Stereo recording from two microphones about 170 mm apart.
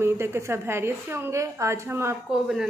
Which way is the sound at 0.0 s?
15° right (ahead or behind).